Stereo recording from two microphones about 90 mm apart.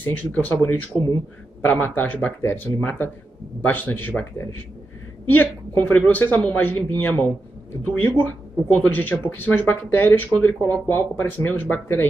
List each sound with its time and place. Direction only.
0.0 s speech: 15° left (ahead or behind)
0.9 s speech: 10° right (ahead or behind)
1.7 s speech: 20° left (ahead or behind)